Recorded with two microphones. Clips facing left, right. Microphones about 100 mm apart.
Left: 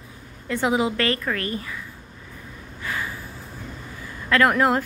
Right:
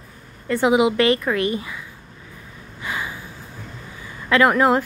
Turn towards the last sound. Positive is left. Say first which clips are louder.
# right 3 dB
turn(degrees=0)  # may be behind; listen again after turning